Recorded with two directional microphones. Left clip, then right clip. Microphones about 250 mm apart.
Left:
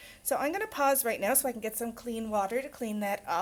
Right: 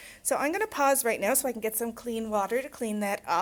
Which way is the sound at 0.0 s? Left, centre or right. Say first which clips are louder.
Right 2 dB; right.